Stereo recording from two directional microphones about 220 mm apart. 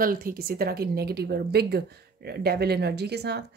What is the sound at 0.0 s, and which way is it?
Speech, 40° right (ahead or behind).